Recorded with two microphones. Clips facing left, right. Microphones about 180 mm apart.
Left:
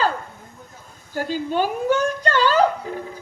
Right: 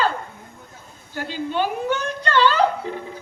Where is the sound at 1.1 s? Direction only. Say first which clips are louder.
Left 2 dB; 40° left (ahead or behind).